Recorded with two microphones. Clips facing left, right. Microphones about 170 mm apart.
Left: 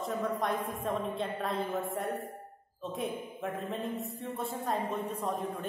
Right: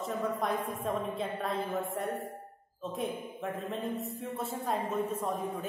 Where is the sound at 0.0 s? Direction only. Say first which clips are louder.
Even; centre (ahead or behind).